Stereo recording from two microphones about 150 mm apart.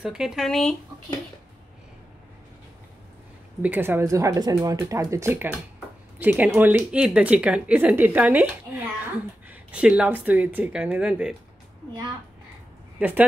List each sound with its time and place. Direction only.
0.0 s speech: 5° right (ahead or behind)
3.6 s speech: 10° right (ahead or behind)
13.0 s speech: 10° right (ahead or behind)